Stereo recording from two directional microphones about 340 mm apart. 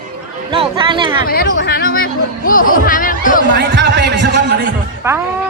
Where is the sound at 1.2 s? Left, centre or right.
Left.